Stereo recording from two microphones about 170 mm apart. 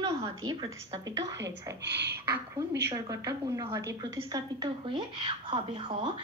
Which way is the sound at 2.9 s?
20° right (ahead or behind).